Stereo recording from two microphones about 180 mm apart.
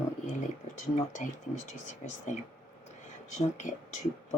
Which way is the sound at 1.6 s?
45° left (ahead or behind).